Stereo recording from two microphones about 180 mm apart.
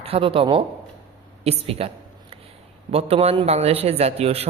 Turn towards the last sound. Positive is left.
turn(degrees=-35)  # may be behind; listen again after turning